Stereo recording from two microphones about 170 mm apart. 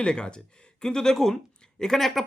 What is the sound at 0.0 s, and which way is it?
Speech, 5° left (ahead or behind).